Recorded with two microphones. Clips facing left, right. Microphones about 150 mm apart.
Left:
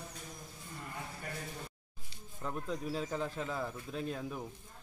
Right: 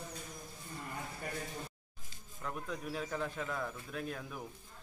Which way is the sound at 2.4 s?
30° left (ahead or behind).